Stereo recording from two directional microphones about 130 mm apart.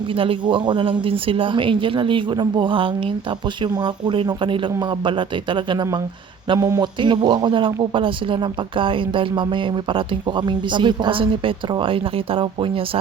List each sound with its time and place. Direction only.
0.1 s speech: 45° right (ahead or behind)